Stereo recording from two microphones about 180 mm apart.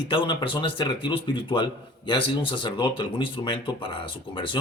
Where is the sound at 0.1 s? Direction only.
25° left (ahead or behind).